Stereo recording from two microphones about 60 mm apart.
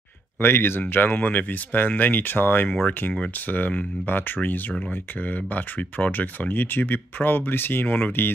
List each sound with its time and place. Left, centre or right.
0.4 s speech: left